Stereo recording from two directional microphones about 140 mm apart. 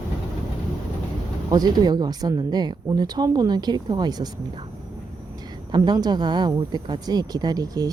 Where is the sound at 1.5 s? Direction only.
30° right (ahead or behind).